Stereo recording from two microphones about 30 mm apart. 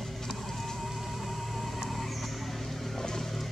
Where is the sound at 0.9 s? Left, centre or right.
Centre.